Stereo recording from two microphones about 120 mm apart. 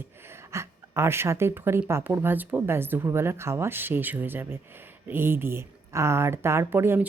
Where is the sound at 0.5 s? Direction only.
20° right (ahead or behind).